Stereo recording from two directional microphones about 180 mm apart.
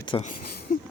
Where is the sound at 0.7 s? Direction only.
50° left (ahead or behind).